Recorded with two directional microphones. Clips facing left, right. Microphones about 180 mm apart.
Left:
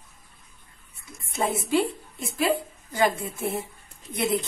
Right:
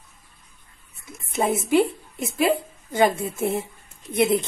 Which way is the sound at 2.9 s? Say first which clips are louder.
Right 4 dB; 20° right (ahead or behind).